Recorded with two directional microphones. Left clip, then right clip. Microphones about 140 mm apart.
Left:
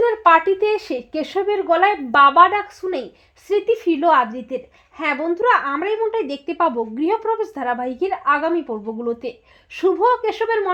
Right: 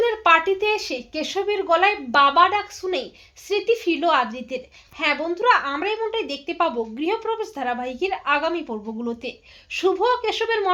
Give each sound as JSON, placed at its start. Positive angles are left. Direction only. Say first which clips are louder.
{"t": 0.0, "sound": "a woman's voice", "louder": "left 3 dB", "side_deg": 55}